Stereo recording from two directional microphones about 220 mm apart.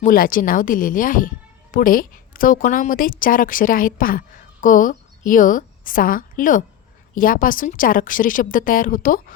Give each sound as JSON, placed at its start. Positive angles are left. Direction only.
{"t": 0.0, "sound": "a woman's voice", "side_deg": 40}